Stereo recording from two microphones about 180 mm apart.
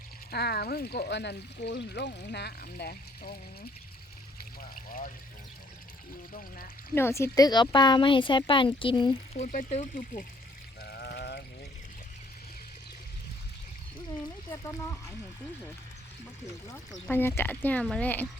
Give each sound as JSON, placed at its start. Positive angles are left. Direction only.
{"t": 0.3, "sound": "speech", "side_deg": 60}
{"t": 4.7, "sound": "water", "side_deg": 50}
{"t": 6.9, "sound": "speech", "side_deg": 15}
{"t": 9.4, "sound": "speech", "side_deg": 45}
{"t": 10.8, "sound": "a sound", "side_deg": 60}
{"t": 17.1, "sound": "speech", "side_deg": 10}